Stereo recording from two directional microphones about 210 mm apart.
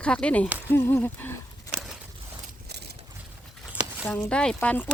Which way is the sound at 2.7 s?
50° right (ahead or behind).